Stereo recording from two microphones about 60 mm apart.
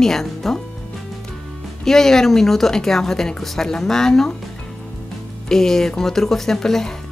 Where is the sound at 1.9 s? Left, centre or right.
Centre.